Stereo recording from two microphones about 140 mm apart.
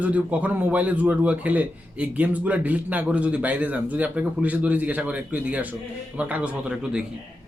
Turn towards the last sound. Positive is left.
turn(degrees=-5)  # may be behind; listen again after turning